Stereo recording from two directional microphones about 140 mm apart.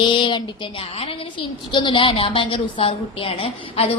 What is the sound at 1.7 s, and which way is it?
A woman's voice, 35° left (ahead or behind).